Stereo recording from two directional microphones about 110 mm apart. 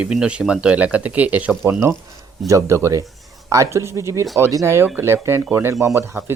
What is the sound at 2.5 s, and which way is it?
Speech, 30° right (ahead or behind).